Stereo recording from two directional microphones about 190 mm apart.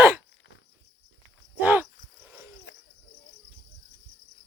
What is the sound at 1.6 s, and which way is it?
Cricket, 10° right (ahead or behind).